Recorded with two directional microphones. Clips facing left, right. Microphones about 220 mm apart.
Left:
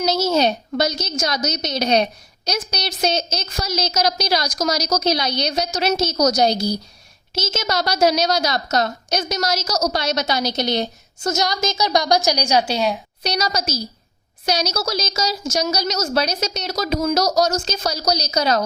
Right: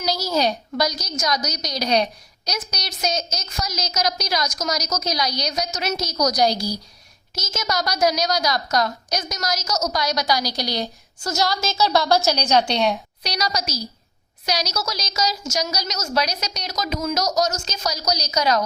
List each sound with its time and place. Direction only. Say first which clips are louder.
0.0 s a woman's voice: left 4 dB; 25° left (ahead or behind); by 13.0 s 5° left (ahead or behind)
13.2 s a woman's voice: left 3 dB; 25° left (ahead or behind)
14.8 s a woman's voice: left 3 dB; 30° left (ahead or behind)